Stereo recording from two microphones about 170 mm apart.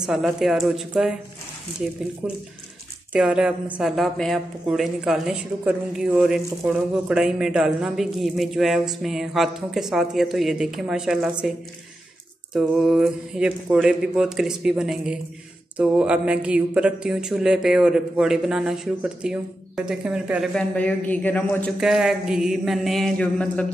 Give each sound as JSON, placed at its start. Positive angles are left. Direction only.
{"t": 0.0, "sound": "a woman's voice", "side_deg": 0}
{"t": 2.2, "sound": "a woman's voice", "side_deg": -5}
{"t": 12.5, "sound": "a woman's voice", "side_deg": -5}
{"t": 20.7, "sound": "a woman's voice", "side_deg": 10}
{"t": 21.7, "sound": "a woman's voice", "side_deg": -5}